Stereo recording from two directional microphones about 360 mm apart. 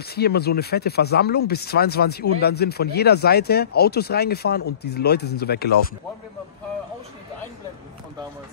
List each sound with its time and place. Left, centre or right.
0.1 s speech: left